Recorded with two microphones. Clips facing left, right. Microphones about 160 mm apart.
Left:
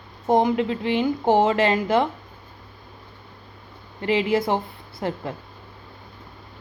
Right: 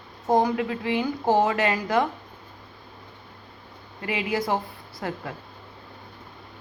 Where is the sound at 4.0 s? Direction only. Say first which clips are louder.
Left 6 dB; 30° left (ahead or behind).